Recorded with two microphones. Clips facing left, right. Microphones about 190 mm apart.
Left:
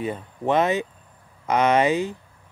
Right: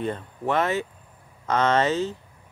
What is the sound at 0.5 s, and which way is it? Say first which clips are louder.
Speech: left 3 dB; 15° left (ahead or behind).